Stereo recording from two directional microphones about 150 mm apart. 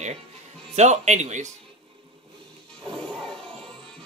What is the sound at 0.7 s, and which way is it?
Speech, 50° right (ahead or behind).